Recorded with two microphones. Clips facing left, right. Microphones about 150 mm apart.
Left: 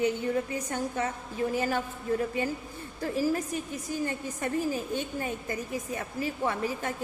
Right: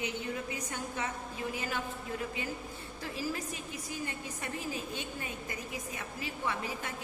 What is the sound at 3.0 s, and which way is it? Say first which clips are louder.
A woman's voice: left 9 dB; 45° left (ahead or behind).